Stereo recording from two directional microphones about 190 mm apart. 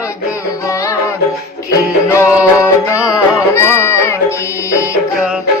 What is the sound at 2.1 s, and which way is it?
Music, 15° left (ahead or behind).